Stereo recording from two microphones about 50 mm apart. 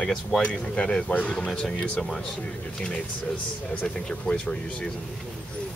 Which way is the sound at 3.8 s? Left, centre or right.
Left.